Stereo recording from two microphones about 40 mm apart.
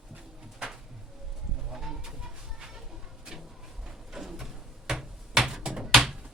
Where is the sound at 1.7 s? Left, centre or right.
Centre.